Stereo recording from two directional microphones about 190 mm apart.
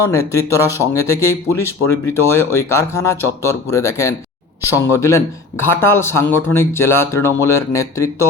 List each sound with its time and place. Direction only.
0.0 s speech: 15° left (ahead or behind)